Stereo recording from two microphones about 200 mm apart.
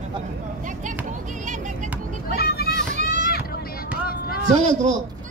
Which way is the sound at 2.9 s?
40° right (ahead or behind).